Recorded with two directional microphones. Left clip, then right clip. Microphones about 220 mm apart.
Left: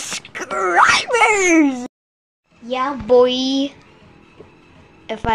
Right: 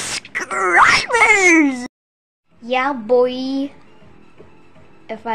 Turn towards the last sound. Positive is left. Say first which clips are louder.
# left 3 dB
turn(degrees=5)  # may be behind; listen again after turning